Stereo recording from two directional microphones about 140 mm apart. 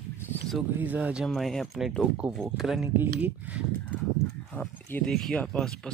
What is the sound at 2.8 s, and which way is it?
Speech, 15° right (ahead or behind).